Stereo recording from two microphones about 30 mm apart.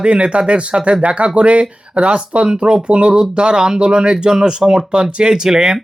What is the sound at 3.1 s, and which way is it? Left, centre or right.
Speech, right.